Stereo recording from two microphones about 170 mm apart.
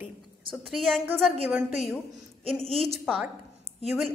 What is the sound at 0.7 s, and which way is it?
A woman's voice, centre (ahead or behind).